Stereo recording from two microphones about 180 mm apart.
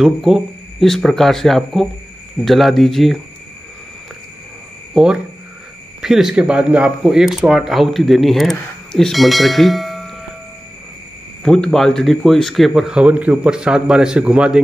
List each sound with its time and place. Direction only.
0.0 s speech: centre (ahead or behind)
4.9 s speech: 5° right (ahead or behind)
11.4 s speech: 5° left (ahead or behind)